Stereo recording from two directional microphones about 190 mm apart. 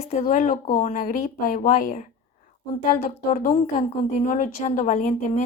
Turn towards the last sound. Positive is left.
turn(degrees=45)  # may be behind; listen again after turning